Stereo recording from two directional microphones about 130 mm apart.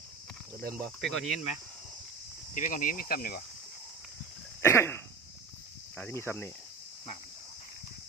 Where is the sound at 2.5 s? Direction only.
90° left.